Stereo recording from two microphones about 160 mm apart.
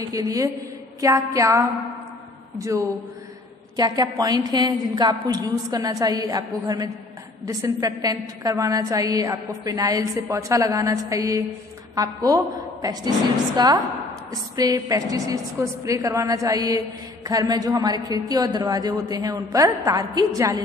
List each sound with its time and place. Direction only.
0.1 s a woman's voice: 20° right (ahead or behind)
3.7 s a woman's voice: 25° right (ahead or behind)